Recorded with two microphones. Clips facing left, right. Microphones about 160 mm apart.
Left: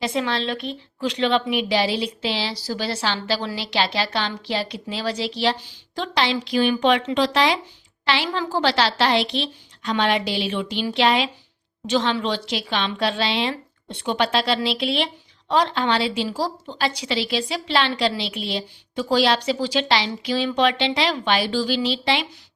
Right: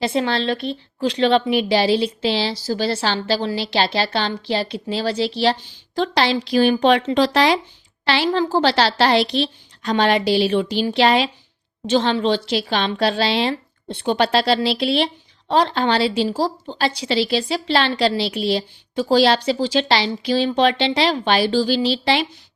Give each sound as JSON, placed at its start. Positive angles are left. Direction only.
{"t": 0.0, "sound": "a woman's voice", "side_deg": -30}